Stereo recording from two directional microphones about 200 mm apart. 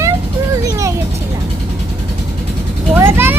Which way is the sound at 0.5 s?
15° right (ahead or behind).